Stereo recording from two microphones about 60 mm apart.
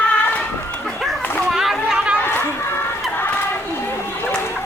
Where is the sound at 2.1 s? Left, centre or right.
Left.